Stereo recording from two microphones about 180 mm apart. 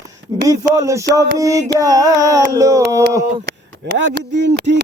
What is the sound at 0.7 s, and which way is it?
Speech, 15° right (ahead or behind).